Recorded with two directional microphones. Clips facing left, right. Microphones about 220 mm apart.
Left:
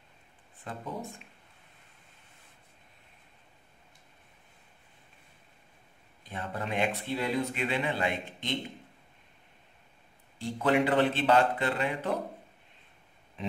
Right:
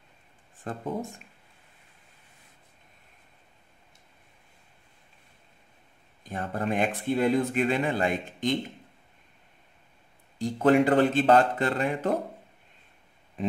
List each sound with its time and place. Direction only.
0.7 s speech: 45° right (ahead or behind)
6.2 s speech: 45° right (ahead or behind)
10.4 s speech: 45° right (ahead or behind)